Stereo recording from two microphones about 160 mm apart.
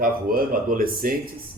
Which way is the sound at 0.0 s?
65° right (ahead or behind).